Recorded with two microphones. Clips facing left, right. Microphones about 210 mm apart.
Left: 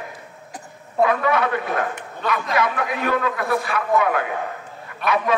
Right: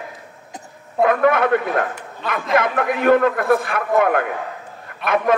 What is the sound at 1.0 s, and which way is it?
A man's voice, 55° right (ahead or behind).